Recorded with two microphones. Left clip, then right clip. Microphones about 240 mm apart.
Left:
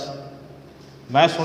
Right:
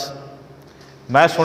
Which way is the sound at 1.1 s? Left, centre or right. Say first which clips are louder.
Right 3 dB; right.